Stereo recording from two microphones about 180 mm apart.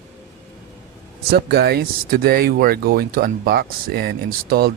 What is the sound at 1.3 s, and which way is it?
Speech, 65° right (ahead or behind).